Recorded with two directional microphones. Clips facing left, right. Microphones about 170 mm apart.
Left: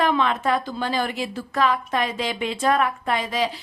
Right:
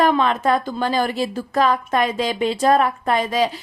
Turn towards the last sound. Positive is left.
turn(degrees=-45)  # may be behind; listen again after turning